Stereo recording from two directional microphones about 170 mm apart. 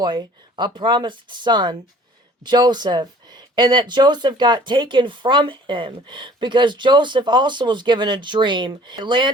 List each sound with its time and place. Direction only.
0.0 s speech: 25° right (ahead or behind)